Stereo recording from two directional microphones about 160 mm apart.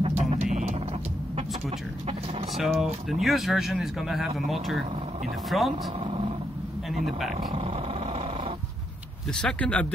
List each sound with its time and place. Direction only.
0.2 s music: 50° right (ahead or behind)
2.5 s speech: centre (ahead or behind)
7.1 s speech: centre (ahead or behind)
7.5 s vehicle: 35° right (ahead or behind)
9.3 s speech: 5° left (ahead or behind)